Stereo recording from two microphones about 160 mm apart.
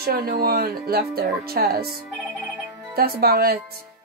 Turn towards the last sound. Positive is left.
turn(degrees=-70)  # may be behind; listen again after turning